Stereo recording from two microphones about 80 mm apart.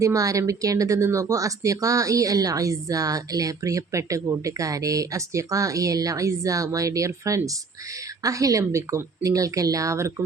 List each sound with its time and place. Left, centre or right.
0.0 s speech: right